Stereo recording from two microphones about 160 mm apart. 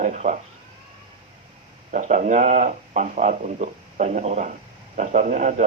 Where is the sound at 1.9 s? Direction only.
50° right (ahead or behind).